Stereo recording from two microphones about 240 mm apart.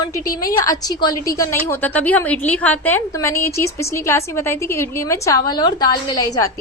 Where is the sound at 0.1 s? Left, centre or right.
Centre.